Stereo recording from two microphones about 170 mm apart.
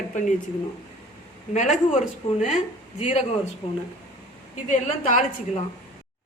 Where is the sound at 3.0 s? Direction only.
40° left (ahead or behind).